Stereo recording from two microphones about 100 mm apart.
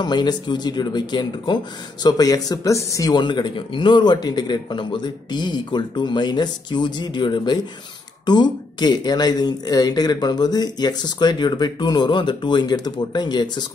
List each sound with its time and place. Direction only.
0.0 s speech: 45° left (ahead or behind)
3.2 s speech: 50° left (ahead or behind)